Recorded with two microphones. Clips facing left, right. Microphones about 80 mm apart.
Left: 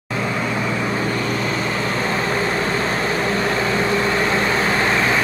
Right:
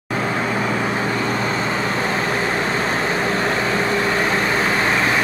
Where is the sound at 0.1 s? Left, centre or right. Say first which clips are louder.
Right 1 dB; right.